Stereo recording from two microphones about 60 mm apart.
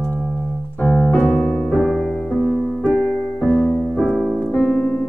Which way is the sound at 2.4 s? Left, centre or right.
Centre.